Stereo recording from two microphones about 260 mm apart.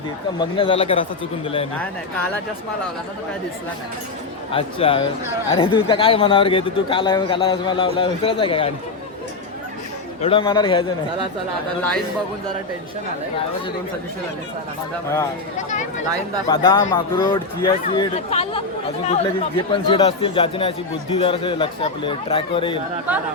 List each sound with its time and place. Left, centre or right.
0.3 s speech: centre
4.5 s speech: left
10.2 s speech: left
15.5 s speech: left
16.5 s speech: centre